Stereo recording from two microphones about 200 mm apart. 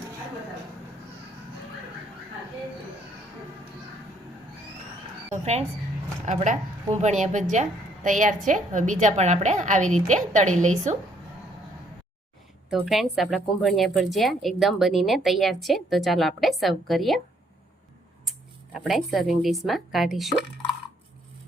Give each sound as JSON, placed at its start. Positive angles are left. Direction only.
{"t": 6.2, "sound": "a woman's voice", "side_deg": -40}
{"t": 12.7, "sound": "speech", "side_deg": 0}
{"t": 18.3, "sound": "speech", "side_deg": 0}